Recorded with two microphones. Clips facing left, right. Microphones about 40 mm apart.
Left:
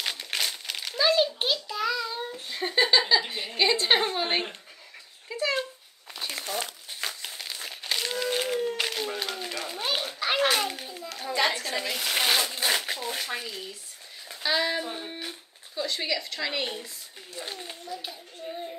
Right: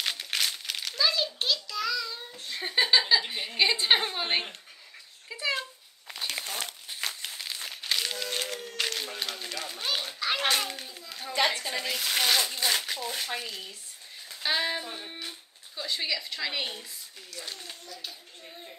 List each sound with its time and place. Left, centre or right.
0.0 s crumpling: centre
1.0 s a sound: centre
2.3 s speech: centre
6.4 s speech: left
6.9 s crumpling: centre
10.4 s children playing: centre
11.9 s speech: centre
14.4 s child singing: centre
14.8 s music: centre
15.7 s speech: centre
17.3 s children playing: left